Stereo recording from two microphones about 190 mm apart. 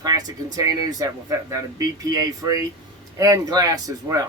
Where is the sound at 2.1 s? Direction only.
20° right (ahead or behind).